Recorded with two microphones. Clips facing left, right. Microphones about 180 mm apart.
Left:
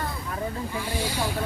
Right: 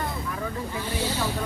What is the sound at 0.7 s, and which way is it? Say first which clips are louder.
Speech: right 1 dB; 10° left (ahead or behind).